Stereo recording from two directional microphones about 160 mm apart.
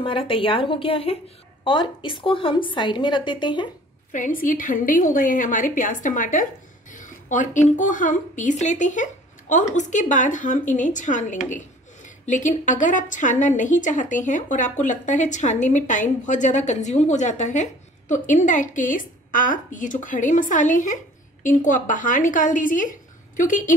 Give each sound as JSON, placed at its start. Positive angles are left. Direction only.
{"t": 0.0, "sound": "a woman's voice", "side_deg": 35}
{"t": 4.1, "sound": "a woman's voice", "side_deg": 55}
{"t": 6.9, "sound": "a sound", "side_deg": 55}
{"t": 7.6, "sound": "a woman's voice", "side_deg": 50}